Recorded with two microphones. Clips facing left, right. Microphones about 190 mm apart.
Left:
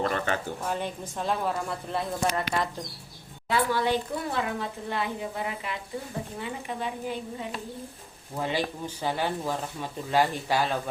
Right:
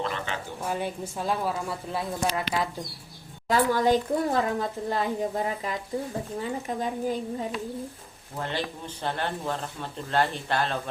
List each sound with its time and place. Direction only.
0.0 s a sound: 50° left (ahead or behind)
0.6 s a woman's voice: 10° right (ahead or behind)
3.5 s speech: 40° right (ahead or behind)
8.4 s speech: 10° left (ahead or behind)